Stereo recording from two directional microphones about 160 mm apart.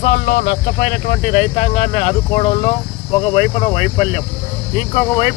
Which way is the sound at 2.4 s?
35° left (ahead or behind).